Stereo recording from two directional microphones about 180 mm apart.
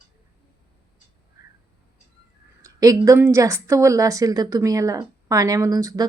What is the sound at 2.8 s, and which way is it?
A woman's voice, 20° right (ahead or behind).